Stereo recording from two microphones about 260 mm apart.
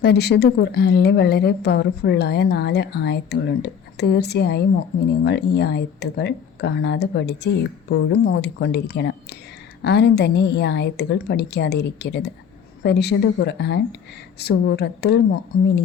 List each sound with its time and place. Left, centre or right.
0.0 s a woman's voice: left